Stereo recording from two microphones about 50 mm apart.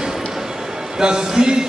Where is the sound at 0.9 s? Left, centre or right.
Centre.